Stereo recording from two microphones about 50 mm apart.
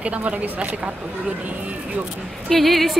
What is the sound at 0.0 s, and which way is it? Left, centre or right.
Speech, right.